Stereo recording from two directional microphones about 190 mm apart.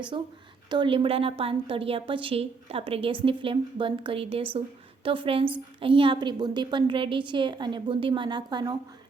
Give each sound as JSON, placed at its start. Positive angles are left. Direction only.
{"t": 0.1, "sound": "a woman's voice", "side_deg": -25}